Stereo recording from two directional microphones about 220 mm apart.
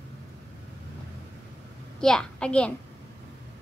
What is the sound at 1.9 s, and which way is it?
Speech, 5° left (ahead or behind).